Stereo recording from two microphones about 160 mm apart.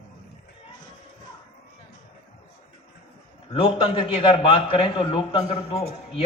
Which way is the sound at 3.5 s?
35° left (ahead or behind).